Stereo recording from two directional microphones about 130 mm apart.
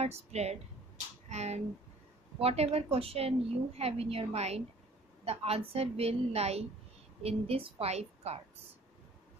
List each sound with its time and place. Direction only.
0.0 s a woman's voice: 55° right (ahead or behind)